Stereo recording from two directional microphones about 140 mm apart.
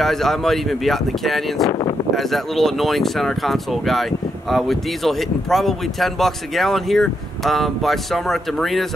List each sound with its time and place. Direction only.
0.0 s speech: centre (ahead or behind)
1.7 s speech: 30° left (ahead or behind)
2.1 s speech: centre (ahead or behind)